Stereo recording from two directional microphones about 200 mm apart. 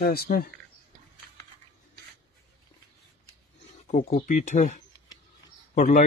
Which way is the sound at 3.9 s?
40° left (ahead or behind).